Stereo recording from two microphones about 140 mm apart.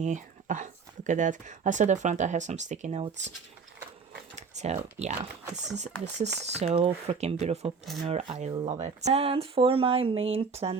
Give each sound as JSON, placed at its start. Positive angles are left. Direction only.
{"t": 0.0, "sound": "speech", "side_deg": -65}
{"t": 4.4, "sound": "speech", "side_deg": -55}